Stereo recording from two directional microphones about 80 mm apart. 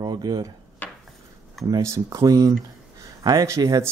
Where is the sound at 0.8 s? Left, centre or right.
Left.